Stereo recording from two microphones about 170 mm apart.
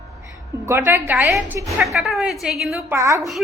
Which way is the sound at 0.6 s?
15° right (ahead or behind).